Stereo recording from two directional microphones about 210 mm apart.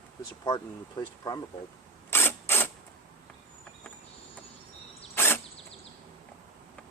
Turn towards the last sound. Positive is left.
turn(degrees=10)  # may be behind; listen again after turning